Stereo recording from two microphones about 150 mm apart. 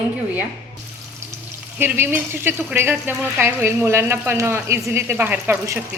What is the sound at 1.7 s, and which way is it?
Speech, 15° right (ahead or behind).